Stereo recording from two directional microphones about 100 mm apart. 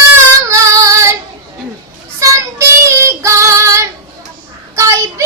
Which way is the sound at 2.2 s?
30° right (ahead or behind).